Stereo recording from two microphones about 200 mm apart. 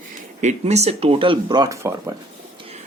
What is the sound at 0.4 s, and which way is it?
Speech, 35° right (ahead or behind).